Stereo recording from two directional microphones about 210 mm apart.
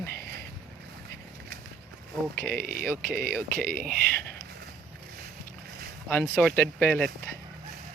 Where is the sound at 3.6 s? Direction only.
45° right (ahead or behind).